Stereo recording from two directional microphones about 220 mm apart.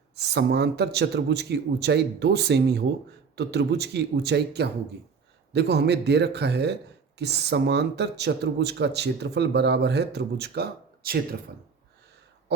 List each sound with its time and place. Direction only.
0.2 s speech: 50° right (ahead or behind)
12.5 s speech: 50° right (ahead or behind)